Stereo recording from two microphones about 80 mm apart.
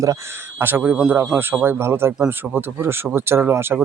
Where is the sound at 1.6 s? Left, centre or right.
Right.